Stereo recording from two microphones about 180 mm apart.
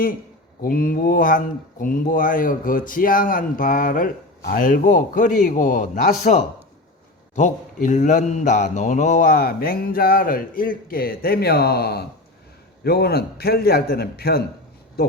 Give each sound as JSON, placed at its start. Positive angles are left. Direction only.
{"t": 0.6, "sound": "mantra", "side_deg": 50}
{"t": 12.8, "sound": "a man's voice", "side_deg": 60}